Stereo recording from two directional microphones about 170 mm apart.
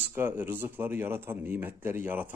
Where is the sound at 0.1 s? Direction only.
10° right (ahead or behind).